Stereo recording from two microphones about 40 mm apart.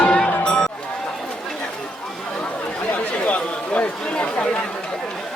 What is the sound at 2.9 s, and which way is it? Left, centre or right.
Chatter, left.